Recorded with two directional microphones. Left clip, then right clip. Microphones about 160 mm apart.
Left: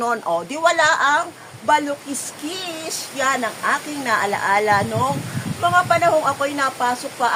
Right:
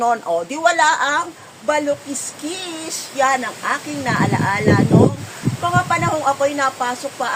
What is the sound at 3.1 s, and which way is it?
Speech, 20° left (ahead or behind).